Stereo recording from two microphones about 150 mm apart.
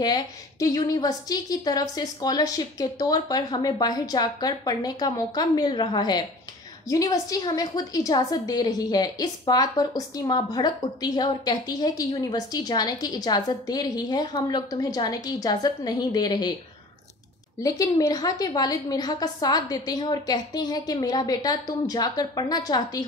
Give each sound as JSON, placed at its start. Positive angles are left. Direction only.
{"t": 0.0, "sound": "a woman's voice", "side_deg": 25}
{"t": 17.6, "sound": "a woman's voice", "side_deg": 25}